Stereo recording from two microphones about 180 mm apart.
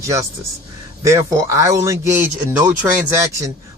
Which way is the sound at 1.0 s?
15° right (ahead or behind).